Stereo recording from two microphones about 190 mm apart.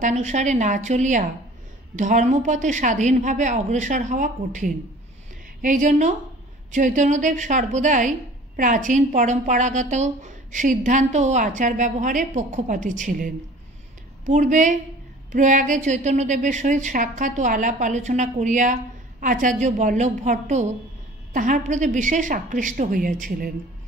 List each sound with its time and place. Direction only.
0.0 s a woman's voice: 40° right (ahead or behind)